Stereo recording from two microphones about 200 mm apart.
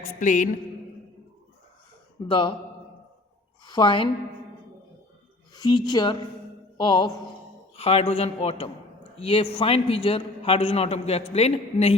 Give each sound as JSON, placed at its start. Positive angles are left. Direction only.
{"t": 0.2, "sound": "a sound", "side_deg": 40}
{"t": 2.2, "sound": "a man's voice", "side_deg": 25}
{"t": 3.7, "sound": "a woman's voice", "side_deg": 25}
{"t": 5.5, "sound": "a man's voice", "side_deg": 20}